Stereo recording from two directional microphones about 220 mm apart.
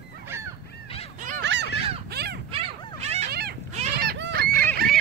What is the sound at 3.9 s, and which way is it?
Fowl, 50° right (ahead or behind).